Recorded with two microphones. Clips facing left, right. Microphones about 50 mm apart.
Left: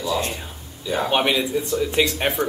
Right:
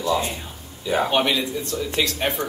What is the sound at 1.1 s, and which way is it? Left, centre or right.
Speech, centre.